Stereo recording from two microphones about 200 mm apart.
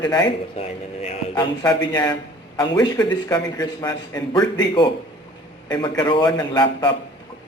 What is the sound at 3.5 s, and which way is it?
A man's voice, 20° left (ahead or behind).